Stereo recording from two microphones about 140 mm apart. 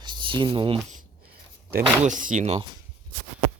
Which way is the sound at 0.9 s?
80° right.